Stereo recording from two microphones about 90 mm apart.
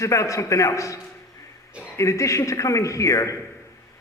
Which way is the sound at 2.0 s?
35° left (ahead or behind).